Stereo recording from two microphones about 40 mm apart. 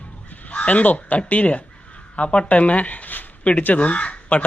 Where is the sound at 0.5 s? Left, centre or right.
Left.